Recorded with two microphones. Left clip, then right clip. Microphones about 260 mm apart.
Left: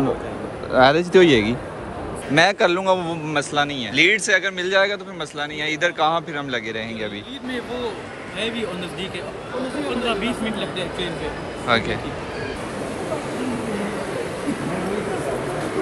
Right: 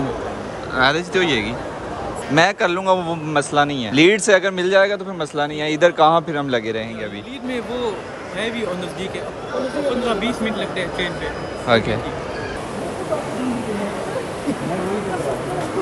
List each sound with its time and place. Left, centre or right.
0.7 s speech: centre
2.3 s a man's voice: centre
11.6 s a man's voice: centre